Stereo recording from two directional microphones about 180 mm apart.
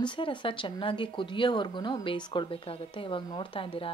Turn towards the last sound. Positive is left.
turn(degrees=30)  # may be behind; listen again after turning